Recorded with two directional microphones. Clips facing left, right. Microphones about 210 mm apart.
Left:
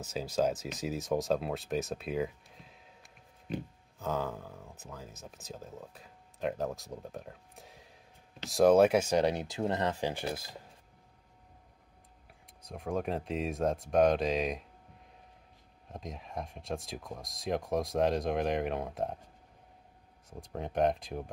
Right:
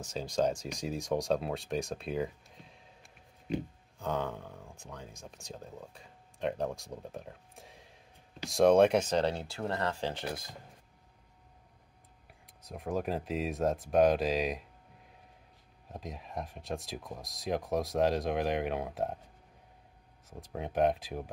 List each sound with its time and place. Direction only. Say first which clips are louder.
0.0 s speech: even; 5° left (ahead or behind)
4.0 s speech: even; centre (ahead or behind)
12.6 s speech: even; centre (ahead or behind)
15.9 s speech: even; centre (ahead or behind)
20.2 s speech: even; centre (ahead or behind)